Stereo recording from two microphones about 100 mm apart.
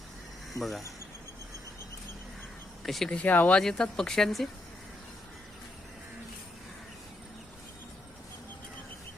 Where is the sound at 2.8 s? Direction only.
Centre (ahead or behind).